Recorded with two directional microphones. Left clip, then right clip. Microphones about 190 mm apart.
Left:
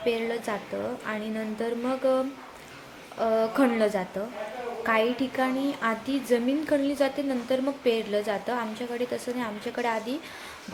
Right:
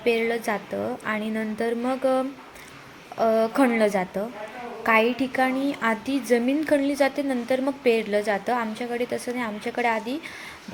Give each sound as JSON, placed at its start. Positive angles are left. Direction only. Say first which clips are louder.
{"t": 0.0, "sound": "a woman's voice", "louder": "right 5 dB", "side_deg": -25}